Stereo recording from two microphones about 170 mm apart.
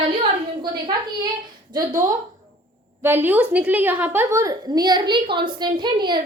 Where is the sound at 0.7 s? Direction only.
25° right (ahead or behind).